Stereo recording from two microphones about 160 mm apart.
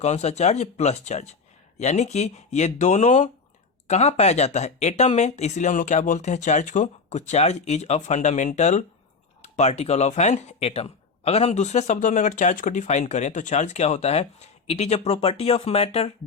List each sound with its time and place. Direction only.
0.0 s speech: 45° left (ahead or behind)